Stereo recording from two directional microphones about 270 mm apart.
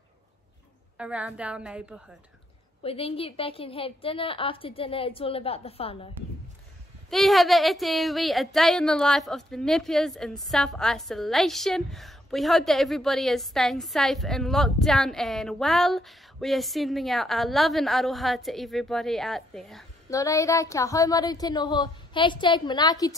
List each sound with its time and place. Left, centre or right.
0.9 s speech: centre
2.8 s a woman's voice: left
7.1 s speech: centre
20.1 s speech: centre